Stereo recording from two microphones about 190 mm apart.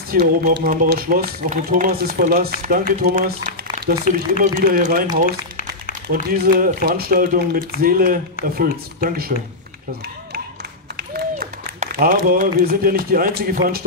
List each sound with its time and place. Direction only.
0.1 s speech: 50° right (ahead or behind)
6.0 s speech: 50° right (ahead or behind)
11.0 s speech: 50° right (ahead or behind)